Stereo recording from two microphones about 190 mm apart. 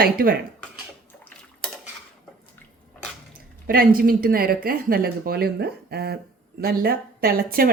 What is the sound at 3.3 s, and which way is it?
Speech, 50° right (ahead or behind).